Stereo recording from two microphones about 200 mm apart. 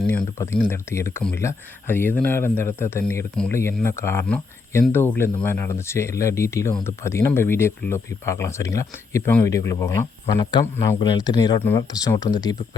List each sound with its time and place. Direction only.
0.1 s speech: 10° left (ahead or behind)